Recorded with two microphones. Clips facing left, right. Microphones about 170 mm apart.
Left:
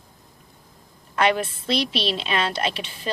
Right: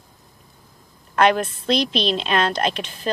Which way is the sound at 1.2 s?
50° right (ahead or behind).